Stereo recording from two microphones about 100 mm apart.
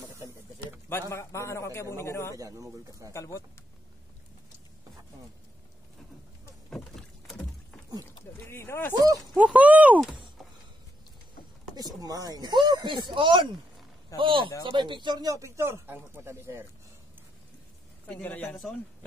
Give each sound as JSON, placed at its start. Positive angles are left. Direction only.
{"t": 0.8, "sound": "a man's voice", "side_deg": 25}
{"t": 2.3, "sound": "speech", "side_deg": -35}
{"t": 3.1, "sound": "a man's voice", "side_deg": 30}
{"t": 6.7, "sound": "rowboat", "side_deg": 5}
{"t": 8.5, "sound": "a man's voice", "side_deg": 25}
{"t": 9.1, "sound": "speech", "side_deg": 0}
{"t": 9.4, "sound": "speech", "side_deg": -15}
{"t": 12.0, "sound": "speech", "side_deg": -40}
{"t": 18.0, "sound": "a man's voice", "side_deg": 15}